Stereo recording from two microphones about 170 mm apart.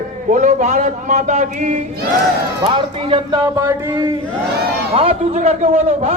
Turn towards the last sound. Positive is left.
turn(degrees=-40)  # may be behind; listen again after turning